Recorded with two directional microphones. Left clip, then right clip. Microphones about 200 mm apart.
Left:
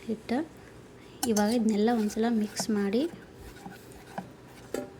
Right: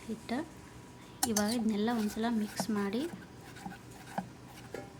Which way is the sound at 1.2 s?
15° left (ahead or behind).